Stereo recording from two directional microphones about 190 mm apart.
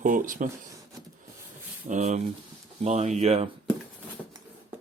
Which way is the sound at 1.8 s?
40° right (ahead or behind).